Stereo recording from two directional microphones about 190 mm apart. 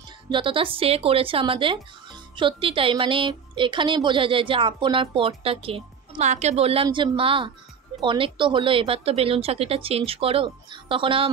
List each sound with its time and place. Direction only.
0.3 s speech: 25° right (ahead or behind)